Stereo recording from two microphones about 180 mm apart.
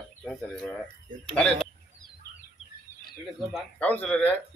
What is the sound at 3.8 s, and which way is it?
Speech, 10° left (ahead or behind).